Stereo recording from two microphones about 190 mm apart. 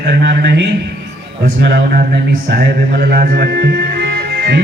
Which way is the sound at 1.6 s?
55° right (ahead or behind).